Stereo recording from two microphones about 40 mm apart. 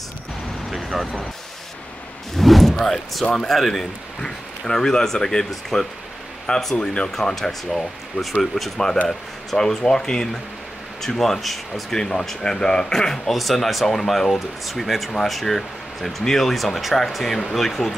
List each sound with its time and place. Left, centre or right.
0.7 s vehicle: centre
2.3 s a sound: centre
3.3 s speech: centre; by 7.1 s left
7.1 s speech: centre
12.0 s speech: centre
13.3 s speech: centre